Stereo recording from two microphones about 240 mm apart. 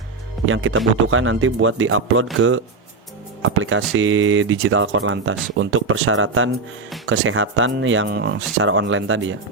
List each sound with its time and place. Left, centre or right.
0.4 s speech: right
3.4 s speech: right